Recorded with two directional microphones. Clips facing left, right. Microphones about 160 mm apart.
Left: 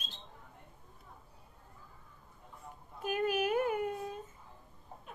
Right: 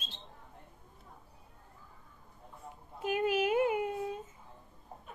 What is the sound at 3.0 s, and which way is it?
Child singing, 20° right (ahead or behind).